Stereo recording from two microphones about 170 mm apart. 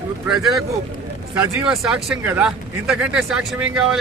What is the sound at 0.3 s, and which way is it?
Speech, centre (ahead or behind).